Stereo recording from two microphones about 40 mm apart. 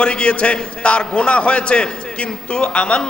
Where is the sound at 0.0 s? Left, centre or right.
Left.